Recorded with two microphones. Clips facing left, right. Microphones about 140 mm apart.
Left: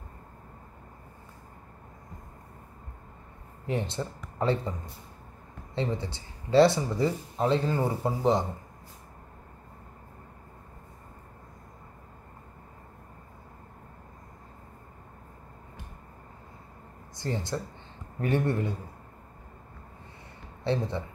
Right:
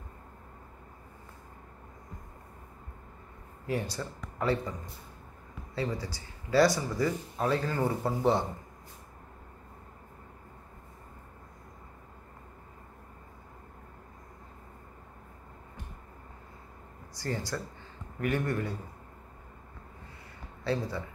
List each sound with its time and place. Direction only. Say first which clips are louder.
3.6 s speech: left 2 dB; 25° left (ahead or behind)
5.8 s speech: left 3 dB; 25° left (ahead or behind)
17.2 s speech: left 2 dB; 20° left (ahead or behind)
20.6 s speech: left 3 dB; 25° left (ahead or behind)